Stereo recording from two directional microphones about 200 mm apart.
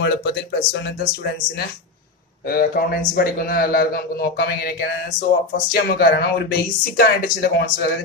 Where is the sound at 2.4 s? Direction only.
50° left (ahead or behind).